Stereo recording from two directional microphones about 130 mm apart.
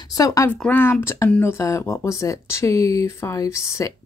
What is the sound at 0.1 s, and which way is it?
Speech, 25° left (ahead or behind).